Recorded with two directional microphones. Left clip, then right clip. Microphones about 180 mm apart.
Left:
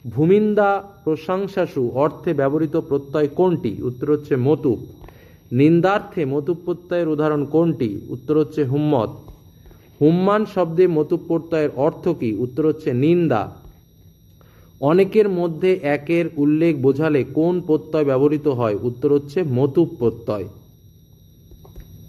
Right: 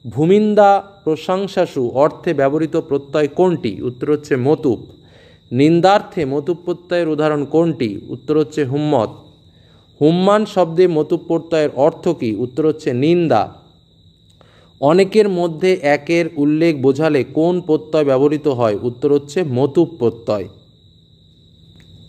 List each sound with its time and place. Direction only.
0.1 s a man's voice: 35° right (ahead or behind)
14.8 s a man's voice: 35° right (ahead or behind)